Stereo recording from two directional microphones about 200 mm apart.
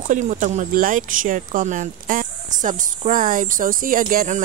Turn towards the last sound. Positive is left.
turn(degrees=-40)  # may be behind; listen again after turning